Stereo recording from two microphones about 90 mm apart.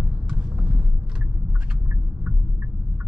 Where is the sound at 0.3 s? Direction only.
10° right (ahead or behind).